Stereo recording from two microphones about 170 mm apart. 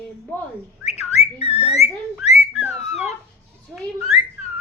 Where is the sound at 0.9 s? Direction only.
40° left (ahead or behind).